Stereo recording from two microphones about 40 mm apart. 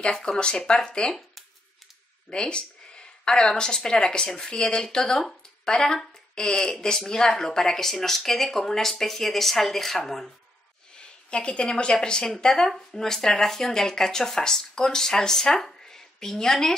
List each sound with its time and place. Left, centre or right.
0.0 s speech: centre
2.3 s speech: left; by 10.3 s centre
11.0 s a sound: left
11.7 s speech: centre